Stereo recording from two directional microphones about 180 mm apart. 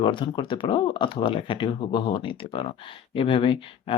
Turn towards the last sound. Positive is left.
turn(degrees=30)  # may be behind; listen again after turning